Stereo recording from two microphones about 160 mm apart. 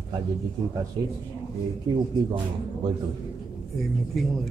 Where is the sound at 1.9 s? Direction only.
30° right (ahead or behind).